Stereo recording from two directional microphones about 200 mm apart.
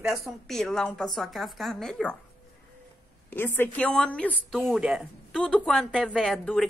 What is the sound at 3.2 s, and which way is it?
A woman's voice, 10° left (ahead or behind).